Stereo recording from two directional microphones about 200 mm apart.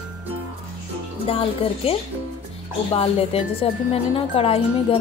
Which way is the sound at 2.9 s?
30° left (ahead or behind).